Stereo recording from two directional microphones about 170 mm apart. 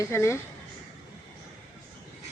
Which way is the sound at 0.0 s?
15° left (ahead or behind).